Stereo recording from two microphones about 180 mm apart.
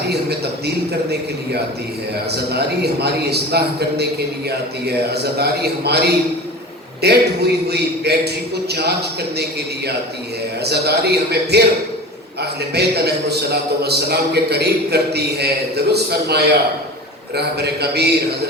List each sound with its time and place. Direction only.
0.1 s a man's voice: 65° right (ahead or behind)
2.3 s a man's voice: 65° right (ahead or behind)